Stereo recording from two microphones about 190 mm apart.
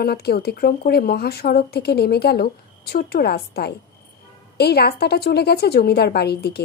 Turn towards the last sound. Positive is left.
turn(degrees=60)  # may be behind; listen again after turning